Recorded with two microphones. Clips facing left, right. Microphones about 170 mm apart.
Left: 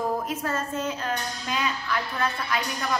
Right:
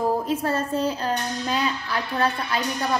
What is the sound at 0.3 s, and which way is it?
A woman's voice, 35° right (ahead or behind).